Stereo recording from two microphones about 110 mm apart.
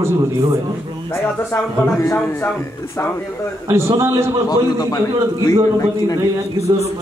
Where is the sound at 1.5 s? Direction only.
25° left (ahead or behind).